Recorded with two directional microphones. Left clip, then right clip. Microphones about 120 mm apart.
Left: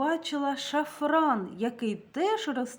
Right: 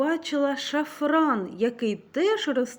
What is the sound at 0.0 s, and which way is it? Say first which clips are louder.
A woman's voice: right 4 dB; 15° right (ahead or behind).